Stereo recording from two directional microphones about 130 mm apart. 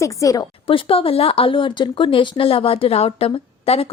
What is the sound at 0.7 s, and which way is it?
A woman's voice, 45° left (ahead or behind).